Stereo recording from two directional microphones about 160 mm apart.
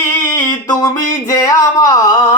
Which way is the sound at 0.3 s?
15° left (ahead or behind).